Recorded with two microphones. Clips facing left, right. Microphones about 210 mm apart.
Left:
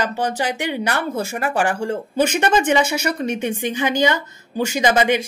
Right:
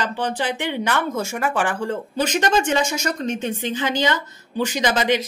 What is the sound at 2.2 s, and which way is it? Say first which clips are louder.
A woman's voice: left 1 dB; 10° left (ahead or behind).